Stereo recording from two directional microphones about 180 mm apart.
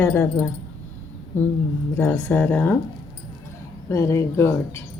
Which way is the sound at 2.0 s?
10° left (ahead or behind).